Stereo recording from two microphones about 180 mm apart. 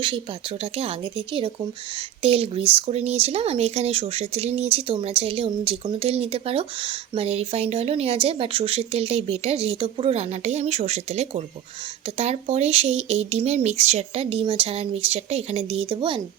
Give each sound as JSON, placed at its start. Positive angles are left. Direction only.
{"t": 0.6, "sound": "speech", "side_deg": -30}